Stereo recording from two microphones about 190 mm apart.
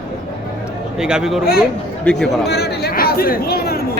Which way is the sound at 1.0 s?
5° right (ahead or behind).